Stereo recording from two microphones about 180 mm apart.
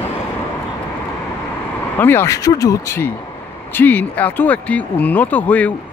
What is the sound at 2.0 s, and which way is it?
Speech, 15° left (ahead or behind).